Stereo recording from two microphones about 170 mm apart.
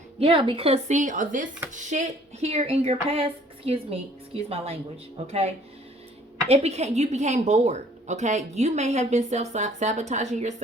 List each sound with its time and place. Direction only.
0.2 s a woman's voice: 30° right (ahead or behind)
6.5 s a woman's voice: 40° right (ahead or behind)